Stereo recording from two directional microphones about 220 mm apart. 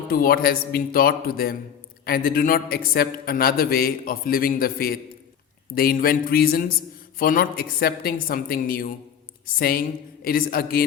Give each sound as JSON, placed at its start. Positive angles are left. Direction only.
{"t": 0.1, "sound": "a man's voice", "side_deg": 40}